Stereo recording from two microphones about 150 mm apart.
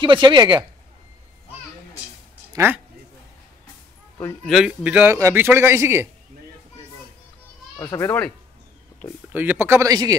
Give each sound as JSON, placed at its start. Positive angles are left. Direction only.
{"t": 0.0, "sound": "speech", "side_deg": -30}
{"t": 2.5, "sound": "speech", "side_deg": -15}
{"t": 4.5, "sound": "a man's voice", "side_deg": -5}
{"t": 7.7, "sound": "speech", "side_deg": 20}
{"t": 9.3, "sound": "a man's voice", "side_deg": -10}